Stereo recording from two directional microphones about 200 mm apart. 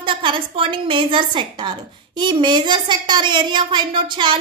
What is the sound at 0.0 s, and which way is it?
A woman's voice, 25° right (ahead or behind).